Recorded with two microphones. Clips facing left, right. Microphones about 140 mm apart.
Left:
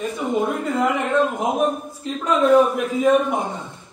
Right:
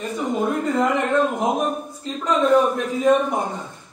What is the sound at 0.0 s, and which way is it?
A man's voice, centre (ahead or behind).